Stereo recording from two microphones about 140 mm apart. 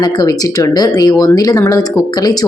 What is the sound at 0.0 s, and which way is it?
A woman's voice, 25° left (ahead or behind).